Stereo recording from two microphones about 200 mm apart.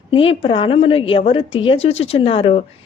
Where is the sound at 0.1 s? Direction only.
25° left (ahead or behind).